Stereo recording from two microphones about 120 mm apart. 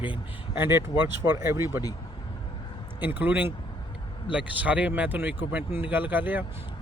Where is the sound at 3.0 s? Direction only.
15° right (ahead or behind).